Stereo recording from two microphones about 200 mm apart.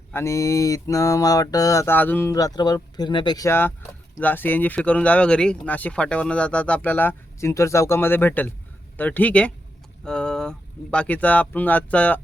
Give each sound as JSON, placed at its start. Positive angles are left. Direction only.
{"t": 0.1, "sound": "speech", "side_deg": 15}